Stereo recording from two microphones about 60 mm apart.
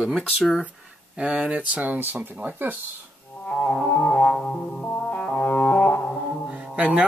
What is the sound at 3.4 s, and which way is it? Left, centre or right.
Music, left.